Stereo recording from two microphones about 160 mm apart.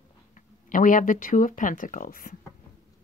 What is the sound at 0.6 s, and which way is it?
Speech, 55° left (ahead or behind).